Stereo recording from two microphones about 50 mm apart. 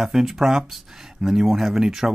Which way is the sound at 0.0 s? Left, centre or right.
Centre.